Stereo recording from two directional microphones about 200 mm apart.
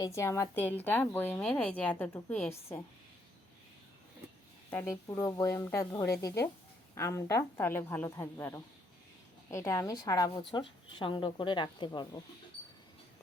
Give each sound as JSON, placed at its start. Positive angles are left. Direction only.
{"t": 0.0, "sound": "a woman's voice", "side_deg": 15}
{"t": 4.7, "sound": "a woman's voice", "side_deg": 10}